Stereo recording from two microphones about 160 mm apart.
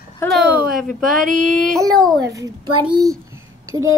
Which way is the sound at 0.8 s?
Centre (ahead or behind).